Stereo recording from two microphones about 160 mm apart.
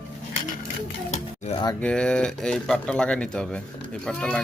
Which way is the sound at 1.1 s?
45° left (ahead or behind).